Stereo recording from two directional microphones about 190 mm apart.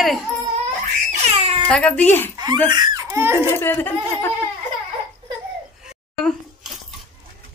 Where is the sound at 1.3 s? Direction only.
35° right (ahead or behind).